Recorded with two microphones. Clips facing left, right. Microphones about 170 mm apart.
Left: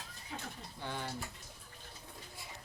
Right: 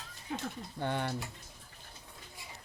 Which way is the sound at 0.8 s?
60° right (ahead or behind).